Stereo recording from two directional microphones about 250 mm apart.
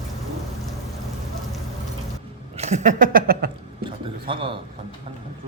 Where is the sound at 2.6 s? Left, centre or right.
Right.